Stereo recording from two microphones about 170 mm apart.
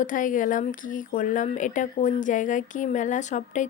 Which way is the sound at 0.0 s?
50° left (ahead or behind).